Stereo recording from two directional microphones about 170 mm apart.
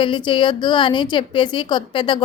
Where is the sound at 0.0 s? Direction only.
30° left (ahead or behind).